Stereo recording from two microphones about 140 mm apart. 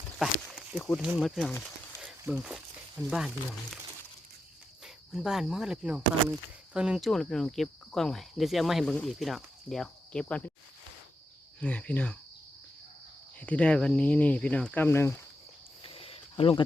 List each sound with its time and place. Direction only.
0.2 s a sound: 5° right (ahead or behind)
1.2 s speech: centre (ahead or behind)
5.1 s speech: 5° right (ahead or behind)
11.6 s speech: 10° left (ahead or behind)
13.4 s speech: 10° left (ahead or behind)
15.8 s cricket: 40° left (ahead or behind)